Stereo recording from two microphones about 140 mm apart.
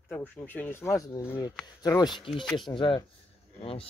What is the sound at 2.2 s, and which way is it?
Speech, 40° left (ahead or behind).